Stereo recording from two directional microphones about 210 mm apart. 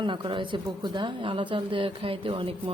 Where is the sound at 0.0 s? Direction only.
25° right (ahead or behind).